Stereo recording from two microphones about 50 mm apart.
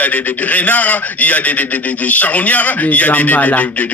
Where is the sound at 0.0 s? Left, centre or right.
Left.